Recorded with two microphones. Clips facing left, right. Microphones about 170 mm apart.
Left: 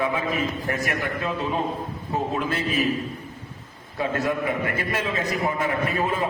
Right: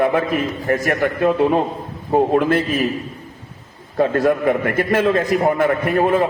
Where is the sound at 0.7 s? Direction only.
50° right (ahead or behind).